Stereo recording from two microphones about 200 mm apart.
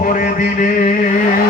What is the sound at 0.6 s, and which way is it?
Music, 40° left (ahead or behind).